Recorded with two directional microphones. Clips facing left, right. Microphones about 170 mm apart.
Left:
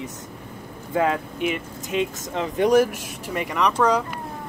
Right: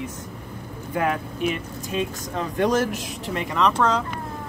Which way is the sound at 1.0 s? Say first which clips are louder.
Left 2 dB; 20° left (ahead or behind).